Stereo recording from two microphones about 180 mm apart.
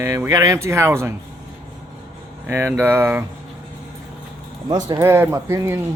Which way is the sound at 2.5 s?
15° right (ahead or behind).